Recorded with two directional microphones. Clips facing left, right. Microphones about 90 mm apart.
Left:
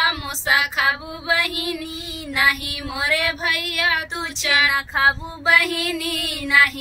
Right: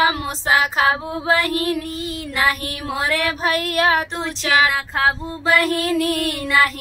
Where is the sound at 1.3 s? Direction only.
40° right (ahead or behind).